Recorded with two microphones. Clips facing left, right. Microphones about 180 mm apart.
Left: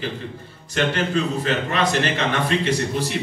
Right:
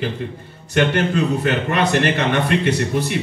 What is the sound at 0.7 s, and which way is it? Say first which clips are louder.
A man's voice: right 4 dB; 60° right (ahead or behind).